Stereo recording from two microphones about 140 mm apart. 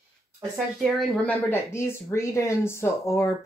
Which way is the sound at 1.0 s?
5° left (ahead or behind).